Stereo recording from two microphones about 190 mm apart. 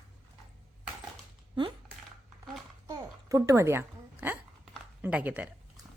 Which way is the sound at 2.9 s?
15° right (ahead or behind).